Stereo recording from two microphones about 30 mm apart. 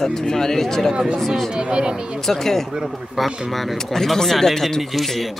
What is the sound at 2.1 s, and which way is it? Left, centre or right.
Speech, centre.